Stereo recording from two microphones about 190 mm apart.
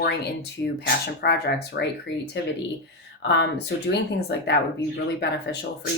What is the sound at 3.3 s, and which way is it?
Speech, 65° left (ahead or behind).